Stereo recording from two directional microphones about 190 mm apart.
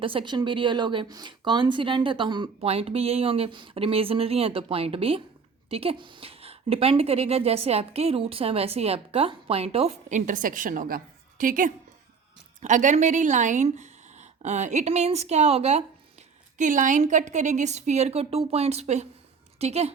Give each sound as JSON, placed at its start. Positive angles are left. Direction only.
{"t": 0.0, "sound": "a woman's voice", "side_deg": -25}